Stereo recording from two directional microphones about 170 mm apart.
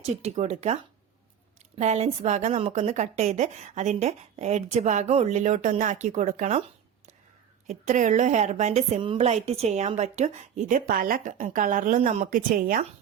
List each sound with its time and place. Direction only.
0.0 s a woman's voice: 40° right (ahead or behind)